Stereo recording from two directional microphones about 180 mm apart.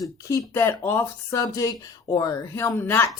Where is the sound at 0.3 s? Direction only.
15° left (ahead or behind).